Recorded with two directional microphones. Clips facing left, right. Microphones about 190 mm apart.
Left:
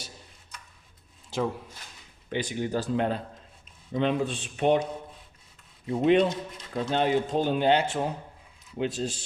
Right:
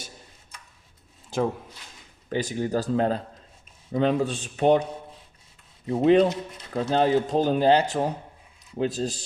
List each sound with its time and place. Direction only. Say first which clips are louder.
2.3 s speech: right 3 dB; 40° right (ahead or behind)
5.8 s speech: right 3 dB; 35° right (ahead or behind)